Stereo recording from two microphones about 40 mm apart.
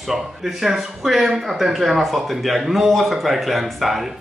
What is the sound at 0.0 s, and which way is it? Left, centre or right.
Speech, centre.